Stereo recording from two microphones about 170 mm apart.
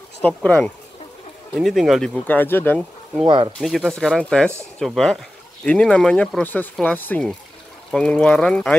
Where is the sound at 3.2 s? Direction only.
30° right (ahead or behind).